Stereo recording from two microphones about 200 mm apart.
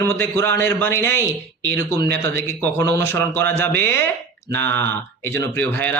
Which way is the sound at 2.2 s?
10° left (ahead or behind).